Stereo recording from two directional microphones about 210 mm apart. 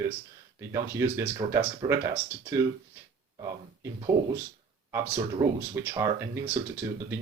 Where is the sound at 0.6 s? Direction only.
15° right (ahead or behind).